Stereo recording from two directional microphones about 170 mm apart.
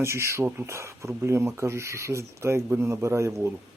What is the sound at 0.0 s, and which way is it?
Speech, 15° right (ahead or behind).